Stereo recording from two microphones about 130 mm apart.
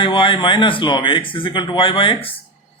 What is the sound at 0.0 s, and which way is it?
Speech, 40° left (ahead or behind).